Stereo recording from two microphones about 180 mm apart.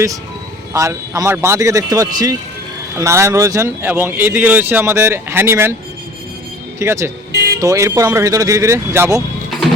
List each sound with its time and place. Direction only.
0.7 s speech: 15° right (ahead or behind)
6.7 s speech: 15° right (ahead or behind)
7.3 s music: 65° right (ahead or behind)
7.6 s speech: 15° right (ahead or behind)